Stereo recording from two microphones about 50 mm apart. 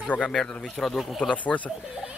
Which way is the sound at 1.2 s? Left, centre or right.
Left.